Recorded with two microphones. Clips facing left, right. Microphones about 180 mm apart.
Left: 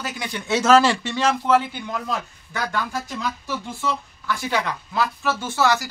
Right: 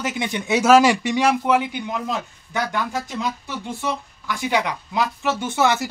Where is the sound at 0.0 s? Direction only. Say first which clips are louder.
Right 5 dB; 20° right (ahead or behind).